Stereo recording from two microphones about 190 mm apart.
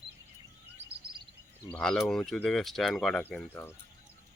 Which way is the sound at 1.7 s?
5° left (ahead or behind).